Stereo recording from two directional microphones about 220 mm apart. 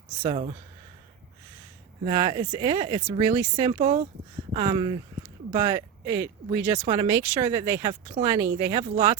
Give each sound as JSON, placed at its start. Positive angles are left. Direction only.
{"t": 0.2, "sound": "speech", "side_deg": -25}
{"t": 2.0, "sound": "speech", "side_deg": -20}